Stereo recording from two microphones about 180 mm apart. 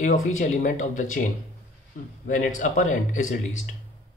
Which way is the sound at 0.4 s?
45° left (ahead or behind).